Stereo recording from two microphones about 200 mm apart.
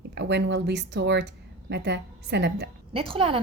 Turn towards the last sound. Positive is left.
turn(degrees=-25)  # may be behind; listen again after turning